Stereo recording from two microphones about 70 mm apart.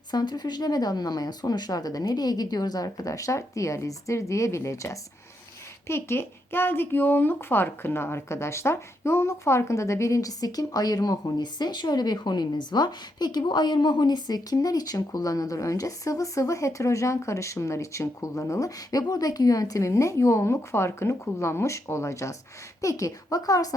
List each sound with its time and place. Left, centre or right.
0.1 s speech: left
5.9 s a child's voice: left